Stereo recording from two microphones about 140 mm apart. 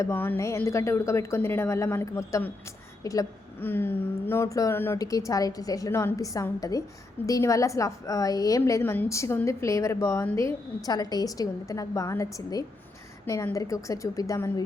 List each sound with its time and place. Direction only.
0.0 s a woman's voice: 15° left (ahead or behind)